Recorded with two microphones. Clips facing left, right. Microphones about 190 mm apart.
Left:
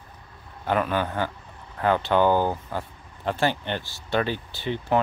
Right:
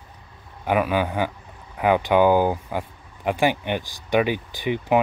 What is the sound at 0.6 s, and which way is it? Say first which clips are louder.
Speech: right 3 dB; 10° right (ahead or behind).